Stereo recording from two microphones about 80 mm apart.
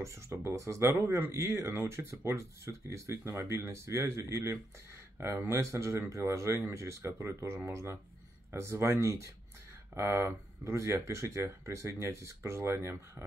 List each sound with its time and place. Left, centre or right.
0.0 s speech: right